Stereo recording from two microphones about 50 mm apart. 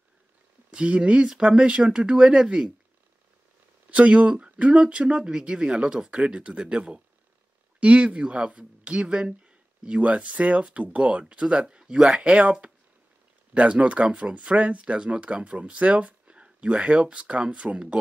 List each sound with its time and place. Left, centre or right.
0.7 s speech: centre
3.9 s speech: right